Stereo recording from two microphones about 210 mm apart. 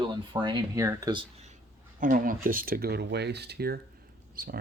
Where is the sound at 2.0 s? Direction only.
40° right (ahead or behind).